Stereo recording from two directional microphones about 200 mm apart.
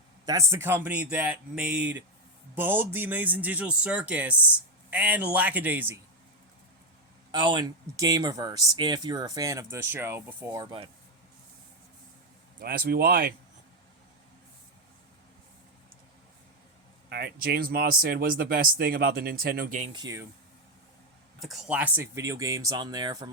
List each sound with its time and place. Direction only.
0.3 s speech: 15° right (ahead or behind)
7.3 s speech: 20° right (ahead or behind)
12.5 s speech: 45° right (ahead or behind)
17.1 s speech: 50° right (ahead or behind)
19.8 s speech: 20° right (ahead or behind)
21.4 s speech: centre (ahead or behind); by 23.3 s 20° right (ahead or behind)